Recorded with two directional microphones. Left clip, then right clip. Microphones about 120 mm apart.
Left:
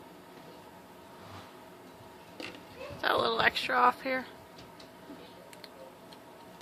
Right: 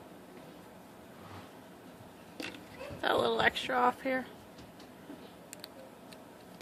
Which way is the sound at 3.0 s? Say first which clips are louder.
Left 1 dB; 30° right (ahead or behind).